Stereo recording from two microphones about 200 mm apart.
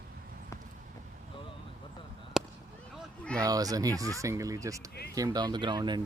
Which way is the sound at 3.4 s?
20° right (ahead or behind).